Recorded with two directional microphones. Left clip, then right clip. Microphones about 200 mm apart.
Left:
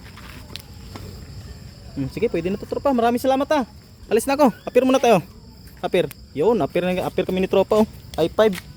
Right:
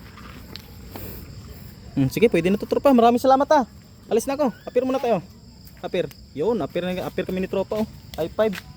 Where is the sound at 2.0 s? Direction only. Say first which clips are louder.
Right 4 dB; 45° right (ahead or behind).